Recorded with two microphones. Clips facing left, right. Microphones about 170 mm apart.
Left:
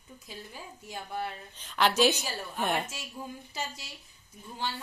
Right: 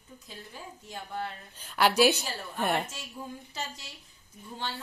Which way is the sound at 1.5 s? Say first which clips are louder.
Right 2 dB; 5° right (ahead or behind).